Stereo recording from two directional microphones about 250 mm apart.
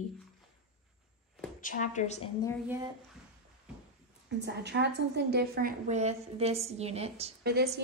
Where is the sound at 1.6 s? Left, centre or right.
Left.